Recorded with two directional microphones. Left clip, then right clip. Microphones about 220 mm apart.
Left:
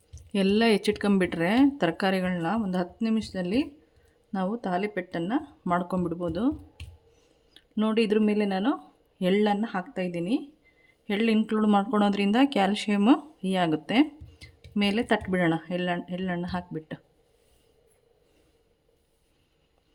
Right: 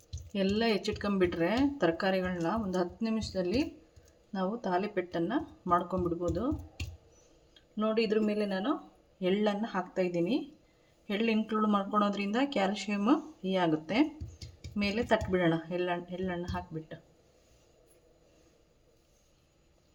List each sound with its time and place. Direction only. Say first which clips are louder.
0.3 s speech: left 7 dB; 50° left (ahead or behind)
7.5 s speech: left 4 dB; 55° left (ahead or behind)